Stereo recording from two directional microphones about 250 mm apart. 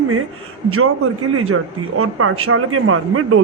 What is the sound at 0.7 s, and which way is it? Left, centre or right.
Speech, right.